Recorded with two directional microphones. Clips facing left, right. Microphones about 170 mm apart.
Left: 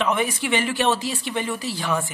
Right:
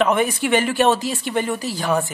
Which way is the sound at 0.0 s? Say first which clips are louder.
Right 5 dB; 50° right (ahead or behind).